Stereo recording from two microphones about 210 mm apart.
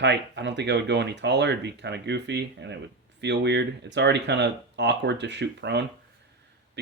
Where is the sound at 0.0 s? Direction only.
55° right (ahead or behind).